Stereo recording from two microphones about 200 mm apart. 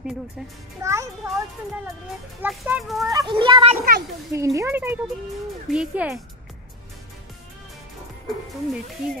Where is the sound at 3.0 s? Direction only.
20° right (ahead or behind).